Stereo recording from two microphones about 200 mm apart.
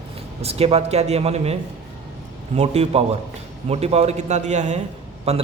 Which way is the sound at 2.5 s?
30° right (ahead or behind).